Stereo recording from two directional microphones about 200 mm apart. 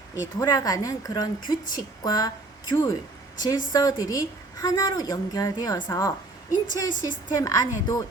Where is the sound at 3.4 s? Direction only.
20° left (ahead or behind).